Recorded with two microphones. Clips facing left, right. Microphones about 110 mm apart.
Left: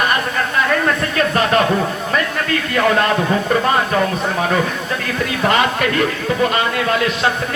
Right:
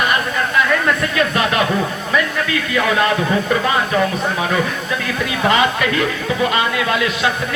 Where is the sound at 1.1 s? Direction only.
40° left (ahead or behind).